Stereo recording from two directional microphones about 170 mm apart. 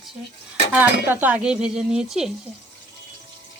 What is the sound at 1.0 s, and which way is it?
Speech, 10° right (ahead or behind).